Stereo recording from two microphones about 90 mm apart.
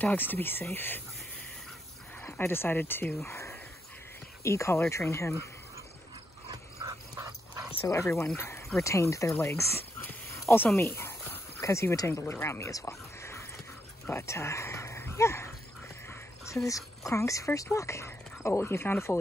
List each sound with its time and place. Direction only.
0.0 s speech: 20° left (ahead or behind)
2.3 s speech: 25° left (ahead or behind)
6.5 s dog: 40° right (ahead or behind)
7.8 s speech: 35° left (ahead or behind)
16.6 s speech: 35° left (ahead or behind)